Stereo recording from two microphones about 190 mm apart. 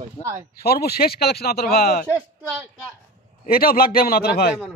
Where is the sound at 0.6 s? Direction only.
55° left (ahead or behind).